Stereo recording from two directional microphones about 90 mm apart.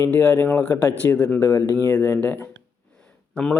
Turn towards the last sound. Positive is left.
turn(degrees=10)  # may be behind; listen again after turning